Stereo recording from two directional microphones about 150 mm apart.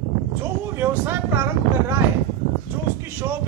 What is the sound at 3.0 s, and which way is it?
Speech, 15° right (ahead or behind).